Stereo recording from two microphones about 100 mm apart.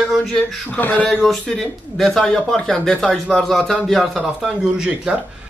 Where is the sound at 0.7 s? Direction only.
15° left (ahead or behind).